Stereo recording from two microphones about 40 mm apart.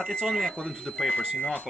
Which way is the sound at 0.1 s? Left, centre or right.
Centre.